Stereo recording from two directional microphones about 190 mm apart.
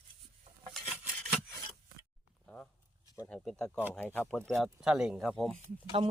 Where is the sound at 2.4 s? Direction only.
10° left (ahead or behind).